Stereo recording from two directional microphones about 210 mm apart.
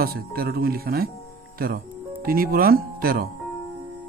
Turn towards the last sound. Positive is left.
turn(degrees=-45)  # may be behind; listen again after turning